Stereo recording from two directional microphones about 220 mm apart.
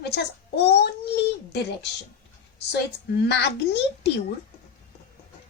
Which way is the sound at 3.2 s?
50° left (ahead or behind).